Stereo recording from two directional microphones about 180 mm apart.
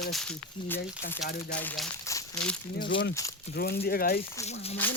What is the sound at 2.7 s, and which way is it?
Speech, 65° left (ahead or behind).